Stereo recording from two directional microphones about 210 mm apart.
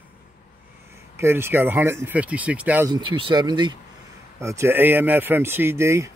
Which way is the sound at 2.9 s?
20° right (ahead or behind).